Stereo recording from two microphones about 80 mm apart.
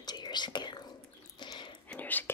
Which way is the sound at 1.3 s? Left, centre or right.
Left.